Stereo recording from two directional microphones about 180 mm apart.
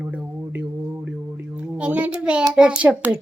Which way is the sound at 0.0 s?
10° right (ahead or behind).